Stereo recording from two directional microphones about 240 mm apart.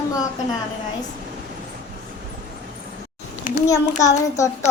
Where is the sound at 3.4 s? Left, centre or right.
Left.